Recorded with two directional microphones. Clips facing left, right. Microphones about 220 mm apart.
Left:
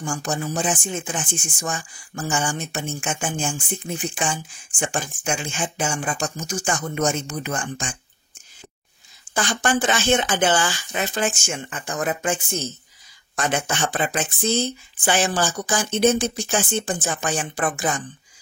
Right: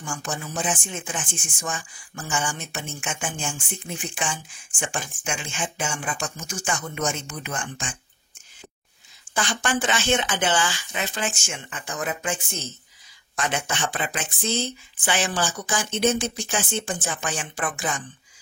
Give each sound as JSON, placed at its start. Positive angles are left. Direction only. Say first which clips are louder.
{"t": 0.0, "sound": "speech", "louder": "left 6 dB", "side_deg": 40}
{"t": 9.3, "sound": "speech", "louder": "left 3 dB", "side_deg": 45}
{"t": 13.4, "sound": "speech", "louder": "left 3 dB", "side_deg": 40}